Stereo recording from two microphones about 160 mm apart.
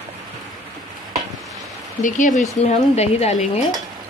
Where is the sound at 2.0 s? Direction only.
50° left (ahead or behind).